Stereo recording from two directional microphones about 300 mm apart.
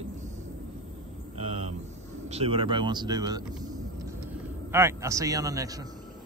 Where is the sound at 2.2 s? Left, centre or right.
Centre.